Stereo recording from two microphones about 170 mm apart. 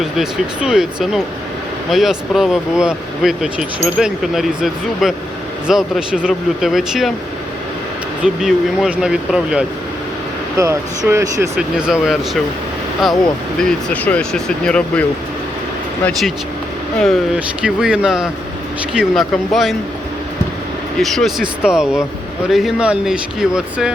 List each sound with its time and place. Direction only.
0.0 s speech: 5° right (ahead or behind)
8.2 s speech: 5° right (ahead or behind)
10.6 s speech: 15° right (ahead or behind)
11.8 s speech: 5° right (ahead or behind)
13.6 s speech: 5° left (ahead or behind)
17.0 s speech: centre (ahead or behind)
21.0 s speech: centre (ahead or behind)